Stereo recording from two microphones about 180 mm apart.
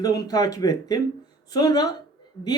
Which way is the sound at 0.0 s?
20° left (ahead or behind).